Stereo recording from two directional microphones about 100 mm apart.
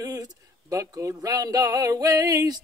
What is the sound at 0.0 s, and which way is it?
Speech, 35° right (ahead or behind).